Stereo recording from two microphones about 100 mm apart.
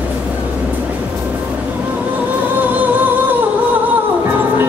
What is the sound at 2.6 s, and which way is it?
Music, 20° right (ahead or behind).